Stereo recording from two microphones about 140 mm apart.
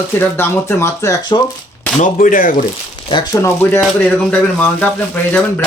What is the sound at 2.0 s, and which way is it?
Speech, 75° left (ahead or behind).